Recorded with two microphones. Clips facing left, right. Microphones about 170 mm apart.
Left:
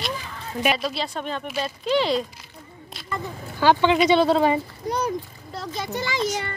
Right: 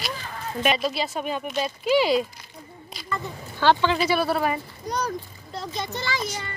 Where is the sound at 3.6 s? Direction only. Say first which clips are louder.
Left 3 dB; 15° left (ahead or behind).